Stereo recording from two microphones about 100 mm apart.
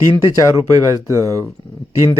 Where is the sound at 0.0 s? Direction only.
30° right (ahead or behind).